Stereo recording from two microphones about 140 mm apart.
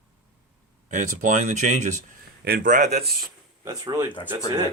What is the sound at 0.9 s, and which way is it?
Speech, 60° right (ahead or behind).